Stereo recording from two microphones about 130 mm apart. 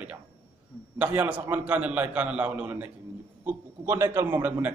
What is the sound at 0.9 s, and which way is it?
A man's voice, 15° right (ahead or behind).